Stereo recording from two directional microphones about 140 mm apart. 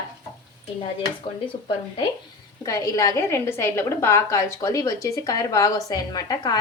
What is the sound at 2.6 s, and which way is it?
A woman's voice, 20° left (ahead or behind).